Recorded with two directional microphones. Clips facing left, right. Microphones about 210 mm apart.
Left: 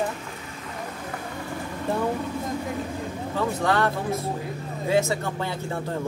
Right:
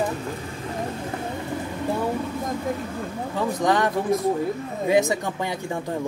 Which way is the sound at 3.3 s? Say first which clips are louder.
Right 2 dB; 15° right (ahead or behind).